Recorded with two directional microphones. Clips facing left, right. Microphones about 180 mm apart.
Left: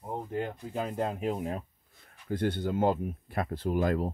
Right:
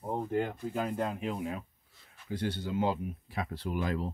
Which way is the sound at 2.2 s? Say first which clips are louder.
Left 5 dB; 50° left (ahead or behind).